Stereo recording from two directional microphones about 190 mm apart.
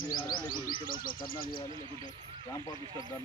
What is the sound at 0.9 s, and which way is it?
Speech, 50° left (ahead or behind).